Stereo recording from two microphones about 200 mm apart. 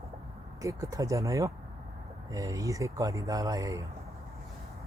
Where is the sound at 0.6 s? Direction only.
15° right (ahead or behind).